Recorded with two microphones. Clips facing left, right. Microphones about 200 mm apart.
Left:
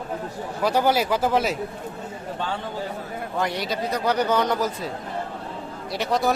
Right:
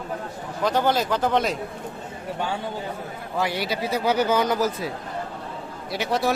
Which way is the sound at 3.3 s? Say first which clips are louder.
Right 1 dB; 5° right (ahead or behind).